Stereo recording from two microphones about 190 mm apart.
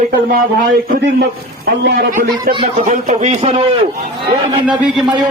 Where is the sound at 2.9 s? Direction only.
40° right (ahead or behind).